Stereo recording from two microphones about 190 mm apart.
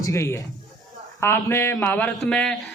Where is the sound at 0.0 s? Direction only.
15° left (ahead or behind).